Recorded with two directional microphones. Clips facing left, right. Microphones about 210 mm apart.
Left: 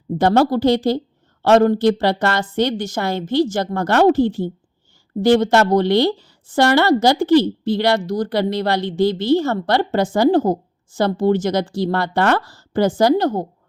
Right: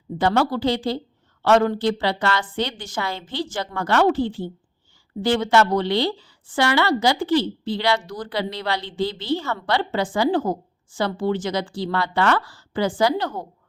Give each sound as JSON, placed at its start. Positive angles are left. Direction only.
{"t": 0.2, "sound": "a woman's voice", "side_deg": 45}